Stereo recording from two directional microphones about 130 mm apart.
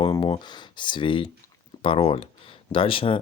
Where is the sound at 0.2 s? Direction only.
35° left (ahead or behind).